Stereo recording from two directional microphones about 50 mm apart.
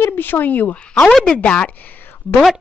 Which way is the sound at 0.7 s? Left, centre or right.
Left.